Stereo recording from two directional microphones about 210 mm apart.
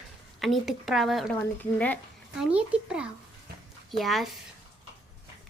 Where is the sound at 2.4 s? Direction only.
5° right (ahead or behind).